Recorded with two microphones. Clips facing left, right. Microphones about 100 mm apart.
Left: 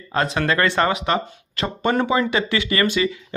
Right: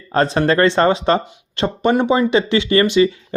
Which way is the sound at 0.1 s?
35° right (ahead or behind).